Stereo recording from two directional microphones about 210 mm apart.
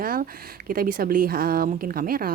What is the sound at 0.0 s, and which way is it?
Speech, 45° right (ahead or behind).